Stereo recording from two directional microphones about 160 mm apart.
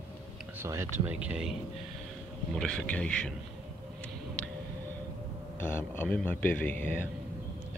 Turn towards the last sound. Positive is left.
turn(degrees=10)  # may be behind; listen again after turning